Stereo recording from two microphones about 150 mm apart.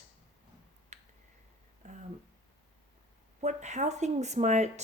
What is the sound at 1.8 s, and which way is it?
Speech, 55° right (ahead or behind).